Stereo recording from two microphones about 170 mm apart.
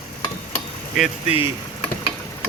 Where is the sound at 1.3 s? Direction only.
35° left (ahead or behind).